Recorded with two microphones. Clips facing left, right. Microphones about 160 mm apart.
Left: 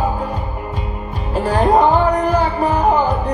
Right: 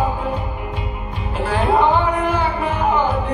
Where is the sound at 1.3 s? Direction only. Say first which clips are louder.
Left 4 dB; 40° left (ahead or behind).